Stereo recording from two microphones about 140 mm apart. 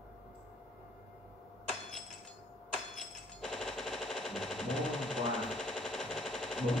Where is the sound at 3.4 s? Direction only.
5° left (ahead or behind).